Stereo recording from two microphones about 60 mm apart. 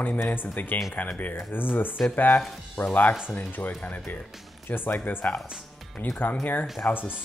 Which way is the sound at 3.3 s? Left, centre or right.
Left.